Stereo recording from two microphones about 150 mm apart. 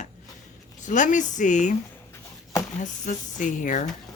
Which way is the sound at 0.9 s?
55° left (ahead or behind).